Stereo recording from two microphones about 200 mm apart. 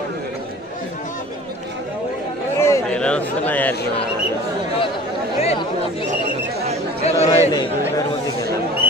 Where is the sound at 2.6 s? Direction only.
10° left (ahead or behind).